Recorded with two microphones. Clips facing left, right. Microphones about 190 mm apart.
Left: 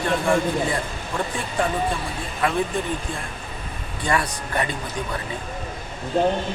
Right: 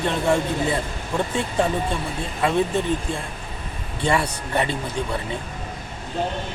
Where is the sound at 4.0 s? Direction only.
25° right (ahead or behind).